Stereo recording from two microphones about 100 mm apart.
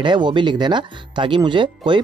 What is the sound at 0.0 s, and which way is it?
Speech, 50° right (ahead or behind).